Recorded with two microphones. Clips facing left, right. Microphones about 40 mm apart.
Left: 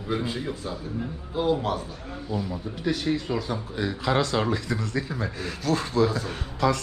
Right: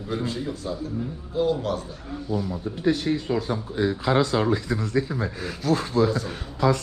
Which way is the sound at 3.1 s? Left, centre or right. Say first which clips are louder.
Right 1 dB; centre.